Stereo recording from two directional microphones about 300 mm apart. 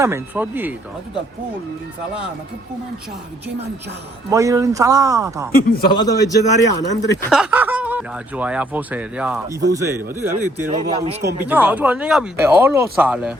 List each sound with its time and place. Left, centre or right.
0.0 s speech: centre
4.3 s speech: centre
5.5 s a man's voice: left
5.9 s speech: centre
7.3 s speech: centre
10.9 s a man's voice: centre
11.3 s speech: centre